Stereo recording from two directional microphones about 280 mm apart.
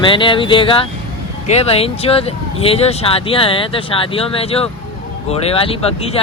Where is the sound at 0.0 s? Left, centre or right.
Centre.